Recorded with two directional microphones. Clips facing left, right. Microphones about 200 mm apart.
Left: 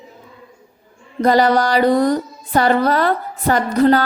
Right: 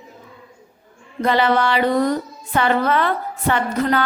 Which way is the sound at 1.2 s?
40° left (ahead or behind).